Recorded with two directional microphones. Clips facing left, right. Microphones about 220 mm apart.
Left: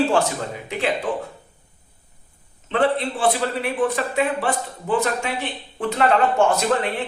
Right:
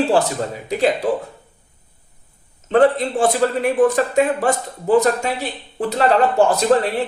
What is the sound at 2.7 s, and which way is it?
A man's voice, 45° right (ahead or behind).